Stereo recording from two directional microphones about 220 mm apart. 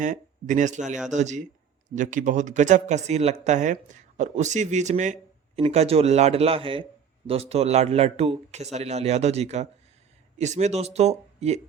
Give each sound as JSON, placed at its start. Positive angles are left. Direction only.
{"t": 0.0, "sound": "a man's voice", "side_deg": -35}